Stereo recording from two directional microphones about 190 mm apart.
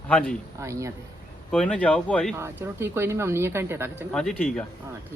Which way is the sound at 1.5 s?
5° left (ahead or behind).